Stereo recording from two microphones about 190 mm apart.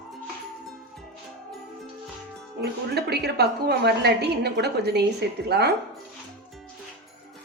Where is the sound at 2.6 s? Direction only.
60° right (ahead or behind).